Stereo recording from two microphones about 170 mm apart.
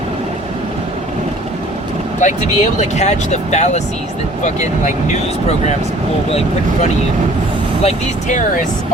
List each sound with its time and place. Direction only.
2.2 s speech: 45° left (ahead or behind)
7.8 s speech: 45° left (ahead or behind)